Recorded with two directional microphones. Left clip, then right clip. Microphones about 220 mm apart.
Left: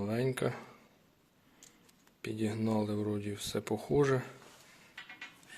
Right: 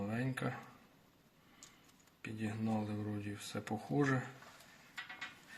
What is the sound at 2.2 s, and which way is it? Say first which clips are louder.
Speech: left 7 dB; 55° left (ahead or behind).